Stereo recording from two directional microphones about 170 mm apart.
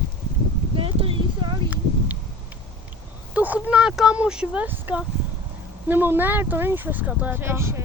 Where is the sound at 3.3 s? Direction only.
10° right (ahead or behind).